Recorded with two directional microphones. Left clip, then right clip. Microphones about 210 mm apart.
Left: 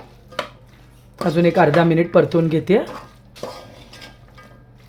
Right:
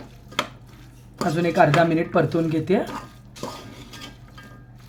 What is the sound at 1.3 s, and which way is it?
Speech, 40° left (ahead or behind).